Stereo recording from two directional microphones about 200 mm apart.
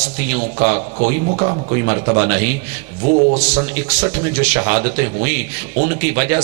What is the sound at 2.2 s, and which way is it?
Speech, 15° right (ahead or behind).